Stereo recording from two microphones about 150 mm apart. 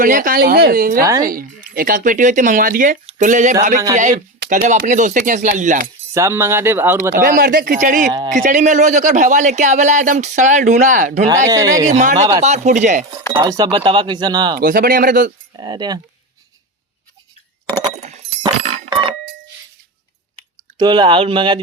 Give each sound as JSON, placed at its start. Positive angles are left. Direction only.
{"t": 0.0, "sound": "a woman's voice", "side_deg": -65}
{"t": 6.1, "sound": "speech", "side_deg": -20}
{"t": 7.1, "sound": "a woman's voice", "side_deg": -70}
{"t": 11.4, "sound": "speech", "side_deg": -25}
{"t": 11.9, "sound": "speech", "side_deg": -50}
{"t": 13.3, "sound": "speech", "side_deg": -25}
{"t": 14.6, "sound": "a woman's voice", "side_deg": -70}
{"t": 15.5, "sound": "speech", "side_deg": -30}
{"t": 18.0, "sound": "a sound", "side_deg": -45}
{"t": 18.4, "sound": "a sound", "side_deg": -30}
{"t": 20.7, "sound": "speech", "side_deg": -30}